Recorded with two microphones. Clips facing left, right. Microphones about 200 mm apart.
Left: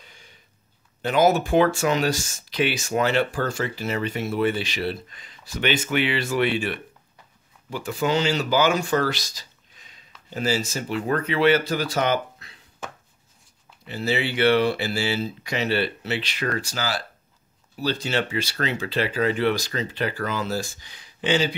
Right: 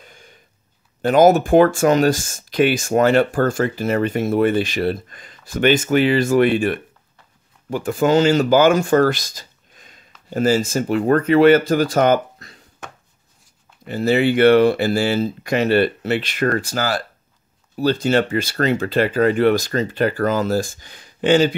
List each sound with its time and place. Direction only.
0.0 s a sound: 50° right (ahead or behind)
1.0 s speech: 50° right (ahead or behind)
13.8 s speech: 50° right (ahead or behind)
18.0 s speech: 50° right (ahead or behind)